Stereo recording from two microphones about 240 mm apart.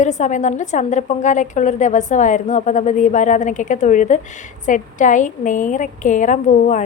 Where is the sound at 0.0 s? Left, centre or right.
Left.